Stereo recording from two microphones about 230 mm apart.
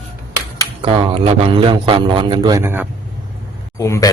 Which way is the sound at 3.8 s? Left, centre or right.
Centre.